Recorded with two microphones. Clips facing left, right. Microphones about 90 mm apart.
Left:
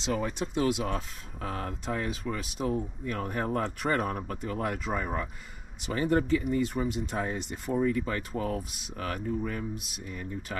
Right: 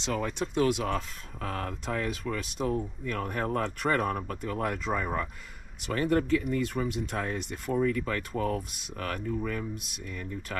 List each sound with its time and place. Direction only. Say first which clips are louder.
0.1 s speech: even; 50° right (ahead or behind)
4.7 s speech: right 1 dB; 40° left (ahead or behind)
5.9 s speech: even; 65° right (ahead or behind)